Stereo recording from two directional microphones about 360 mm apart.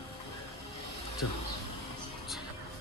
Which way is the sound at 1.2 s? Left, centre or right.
Left.